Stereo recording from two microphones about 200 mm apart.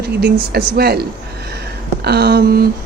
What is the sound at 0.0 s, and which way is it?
Speech, 50° right (ahead or behind).